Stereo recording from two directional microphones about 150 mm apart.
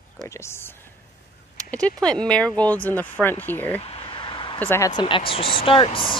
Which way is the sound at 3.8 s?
40° left (ahead or behind).